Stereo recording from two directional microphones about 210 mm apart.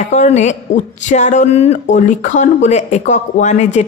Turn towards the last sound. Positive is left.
turn(degrees=35)  # may be behind; listen again after turning